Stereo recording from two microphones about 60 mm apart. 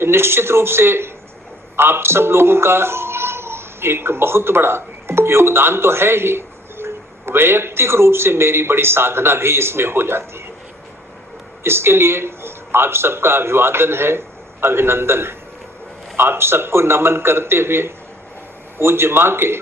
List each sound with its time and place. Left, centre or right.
0.0 s a man's voice: right
11.6 s a man's voice: right